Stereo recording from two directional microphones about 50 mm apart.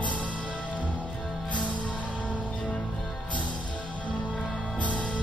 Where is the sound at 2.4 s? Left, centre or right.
Centre.